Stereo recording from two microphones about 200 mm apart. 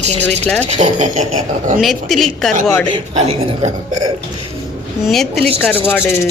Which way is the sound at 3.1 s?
30° right (ahead or behind).